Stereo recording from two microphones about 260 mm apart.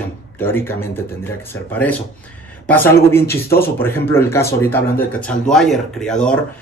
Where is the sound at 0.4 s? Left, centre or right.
Centre.